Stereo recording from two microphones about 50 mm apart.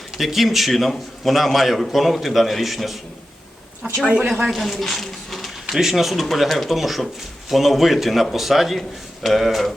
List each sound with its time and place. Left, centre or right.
0.2 s a man's voice: centre
4.0 s speech: centre
4.4 s speech: centre
5.7 s a man's voice: centre